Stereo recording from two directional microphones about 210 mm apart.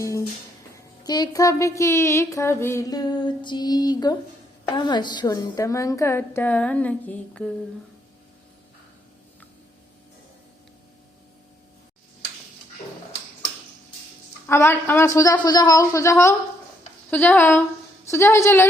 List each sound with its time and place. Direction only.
0.0 s music: 15° left (ahead or behind)
14.4 s music: 10° left (ahead or behind)